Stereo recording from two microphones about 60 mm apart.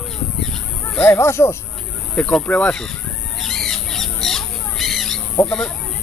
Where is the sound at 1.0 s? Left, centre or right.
Left.